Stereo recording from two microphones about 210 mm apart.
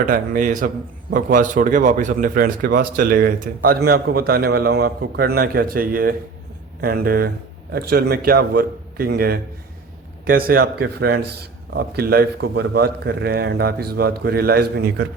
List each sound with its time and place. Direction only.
0.0 s a man's voice: 40° right (ahead or behind)